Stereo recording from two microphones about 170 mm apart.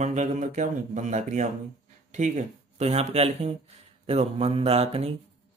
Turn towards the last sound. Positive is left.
turn(degrees=-35)  # may be behind; listen again after turning